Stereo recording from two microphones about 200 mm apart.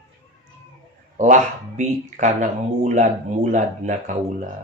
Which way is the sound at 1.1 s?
35° right (ahead or behind).